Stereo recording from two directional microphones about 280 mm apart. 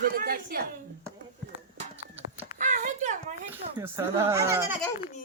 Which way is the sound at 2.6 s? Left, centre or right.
Right.